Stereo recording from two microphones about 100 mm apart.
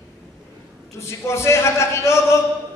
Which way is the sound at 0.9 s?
25° left (ahead or behind).